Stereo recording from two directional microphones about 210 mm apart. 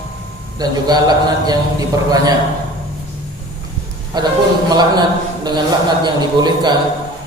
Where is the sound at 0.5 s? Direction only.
20° right (ahead or behind).